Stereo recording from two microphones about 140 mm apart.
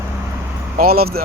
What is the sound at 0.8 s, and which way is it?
Speech, 90° right.